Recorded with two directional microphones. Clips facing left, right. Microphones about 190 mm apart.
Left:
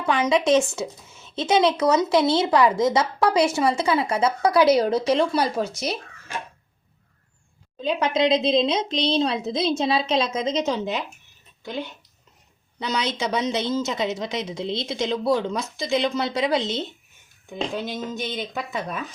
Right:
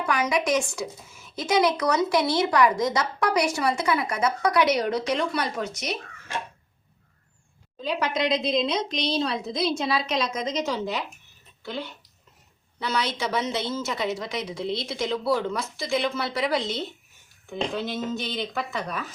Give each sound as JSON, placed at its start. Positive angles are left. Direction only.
{"t": 0.0, "sound": "a woman's voice", "side_deg": 25}
{"t": 7.8, "sound": "a woman's voice", "side_deg": 25}